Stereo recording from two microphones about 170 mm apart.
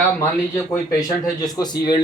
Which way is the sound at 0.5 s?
15° left (ahead or behind).